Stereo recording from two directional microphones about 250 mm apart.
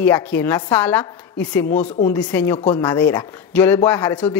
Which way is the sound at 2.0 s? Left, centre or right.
Centre.